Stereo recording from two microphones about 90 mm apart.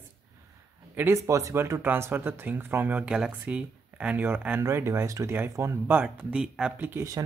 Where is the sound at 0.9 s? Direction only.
20° right (ahead or behind).